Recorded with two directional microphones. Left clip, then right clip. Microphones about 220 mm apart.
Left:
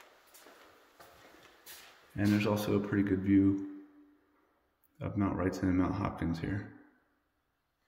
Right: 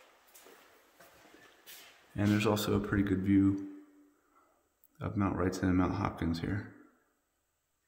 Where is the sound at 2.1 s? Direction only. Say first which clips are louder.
Right 1 dB; 20° right (ahead or behind).